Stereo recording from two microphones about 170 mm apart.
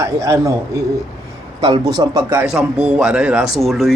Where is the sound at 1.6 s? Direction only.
25° right (ahead or behind).